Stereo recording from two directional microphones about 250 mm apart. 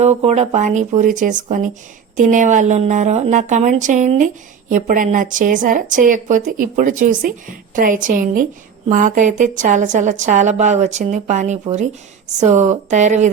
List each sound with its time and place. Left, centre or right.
0.0 s a woman's voice: right